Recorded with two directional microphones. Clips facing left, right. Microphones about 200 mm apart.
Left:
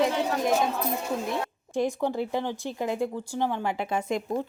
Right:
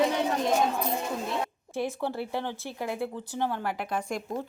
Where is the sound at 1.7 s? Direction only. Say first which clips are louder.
Left 4 dB; 15° left (ahead or behind).